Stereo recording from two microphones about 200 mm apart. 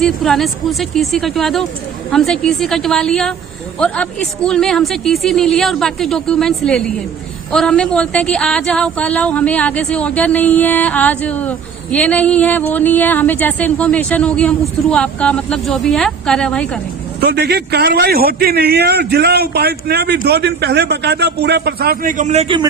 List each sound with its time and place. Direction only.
0.0 s speech: centre (ahead or behind)
17.2 s a man's voice: 55° right (ahead or behind); by 22.6 s 30° right (ahead or behind)